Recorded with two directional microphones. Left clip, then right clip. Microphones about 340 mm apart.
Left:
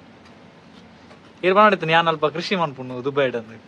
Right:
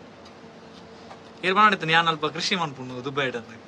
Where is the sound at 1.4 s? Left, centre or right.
Centre.